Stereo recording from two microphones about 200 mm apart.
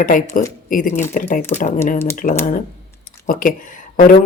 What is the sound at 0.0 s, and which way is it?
Speech, 45° left (ahead or behind).